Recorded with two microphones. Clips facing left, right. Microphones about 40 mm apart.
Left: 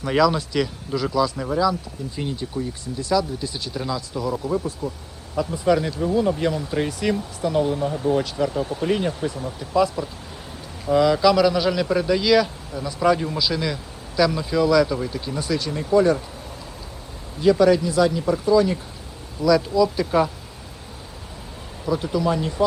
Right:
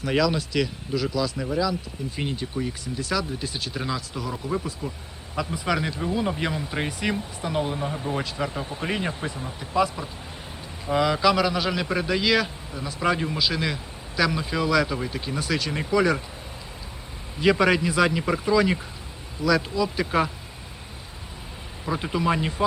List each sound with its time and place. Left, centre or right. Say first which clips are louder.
0.0 s a man's voice: left 4 dB; centre
2.1 s speech: left 2 dB; right
3.0 s speech: left 5 dB; right
3.8 s speech: left 4 dB; centre
4.8 s speech: left 4 dB; right
5.6 s a man's voice: left 7 dB; right
15.4 s speech: left 2 dB; right
17.4 s speech: left 4 dB; right
19.5 s speech: left 5 dB; centre
21.8 s speech: left 3 dB; right